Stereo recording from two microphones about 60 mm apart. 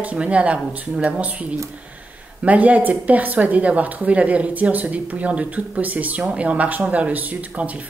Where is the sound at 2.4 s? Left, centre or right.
Right.